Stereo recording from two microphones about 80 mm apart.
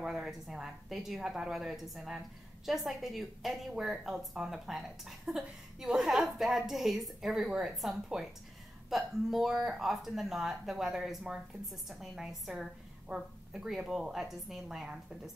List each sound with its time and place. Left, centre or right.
0.0 s a woman's voice: centre